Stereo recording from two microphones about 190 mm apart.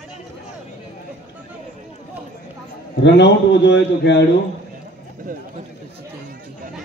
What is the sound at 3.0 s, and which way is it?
Speech, 65° left (ahead or behind).